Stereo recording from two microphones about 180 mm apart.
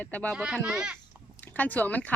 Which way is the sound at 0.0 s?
10° left (ahead or behind).